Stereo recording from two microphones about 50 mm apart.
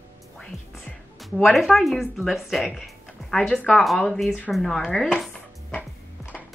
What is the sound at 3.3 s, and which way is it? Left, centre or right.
Speech, centre.